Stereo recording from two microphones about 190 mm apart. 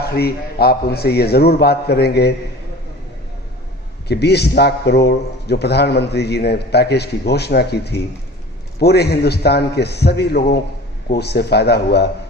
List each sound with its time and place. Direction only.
0.0 s a man's voice: 55° left (ahead or behind)
4.1 s a man's voice: 60° left (ahead or behind)